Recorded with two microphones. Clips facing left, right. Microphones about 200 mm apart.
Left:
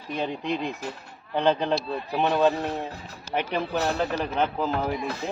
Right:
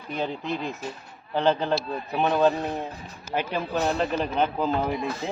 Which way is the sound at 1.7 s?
Centre (ahead or behind).